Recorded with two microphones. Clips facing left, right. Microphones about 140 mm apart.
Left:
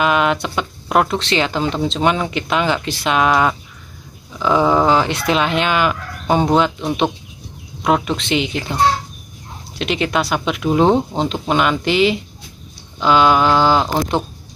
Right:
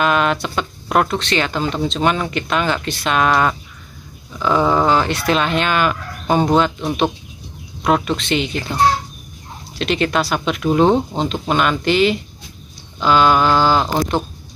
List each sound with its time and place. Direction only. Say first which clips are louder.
0.0 s a sound: left 1 dB; 15° left (ahead or behind)
0.6 s speech: even; 10° left (ahead or behind)
8.2 s speech: left 1 dB; 20° left (ahead or behind)
9.8 s speech: right 1 dB; 10° left (ahead or behind)
13.4 s mantra: left 1 dB; centre (ahead or behind)